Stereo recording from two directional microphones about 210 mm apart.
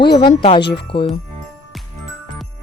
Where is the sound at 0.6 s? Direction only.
55° left (ahead or behind).